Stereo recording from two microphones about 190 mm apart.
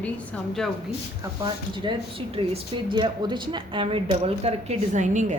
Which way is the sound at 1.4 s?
25° right (ahead or behind).